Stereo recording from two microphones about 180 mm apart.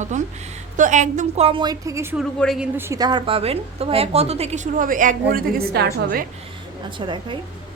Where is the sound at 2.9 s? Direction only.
20° right (ahead or behind); by 5.9 s 60° right (ahead or behind).